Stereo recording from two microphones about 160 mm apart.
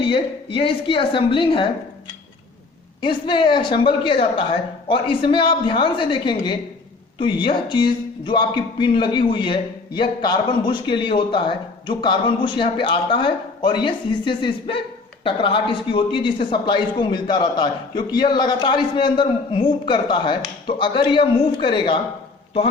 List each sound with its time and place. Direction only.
0.0 s speech: 35° left (ahead or behind)
3.0 s speech: 30° left (ahead or behind)